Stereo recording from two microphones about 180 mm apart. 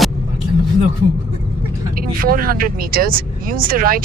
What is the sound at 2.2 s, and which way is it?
Speech, 55° right (ahead or behind).